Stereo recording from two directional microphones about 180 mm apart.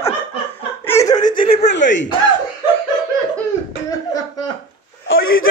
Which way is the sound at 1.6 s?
80° left.